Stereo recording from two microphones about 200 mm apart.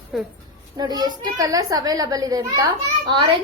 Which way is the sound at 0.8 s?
20° right (ahead or behind).